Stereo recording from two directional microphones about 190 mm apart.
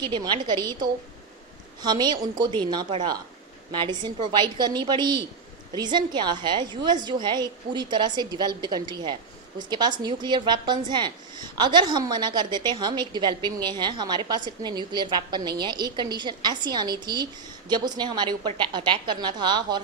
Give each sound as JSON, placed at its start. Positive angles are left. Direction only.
{"t": 0.0, "sound": "a woman's voice", "side_deg": -25}